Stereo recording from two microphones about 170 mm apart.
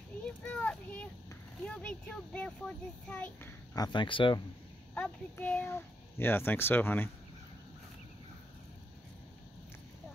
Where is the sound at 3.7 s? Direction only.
25° left (ahead or behind).